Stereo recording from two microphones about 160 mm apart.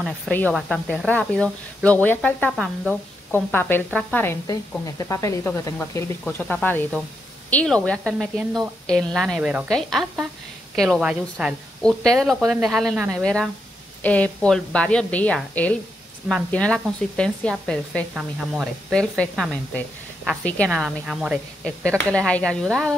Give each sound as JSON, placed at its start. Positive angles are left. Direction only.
{"t": 0.3, "sound": "speech", "side_deg": 10}
{"t": 2.5, "sound": "a woman's voice", "side_deg": 0}
{"t": 3.3, "sound": "a woman's voice", "side_deg": 15}
{"t": 20.7, "sound": "a woman's voice", "side_deg": -5}
{"t": 21.8, "sound": "a woman's voice", "side_deg": 5}